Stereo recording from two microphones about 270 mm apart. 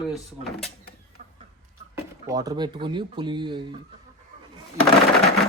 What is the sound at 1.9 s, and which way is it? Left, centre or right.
Speech, centre.